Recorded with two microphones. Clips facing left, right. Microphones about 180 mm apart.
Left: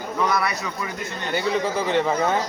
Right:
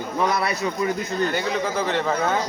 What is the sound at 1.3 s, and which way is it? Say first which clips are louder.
A man's voice: left 1 dB; 10° left (ahead or behind).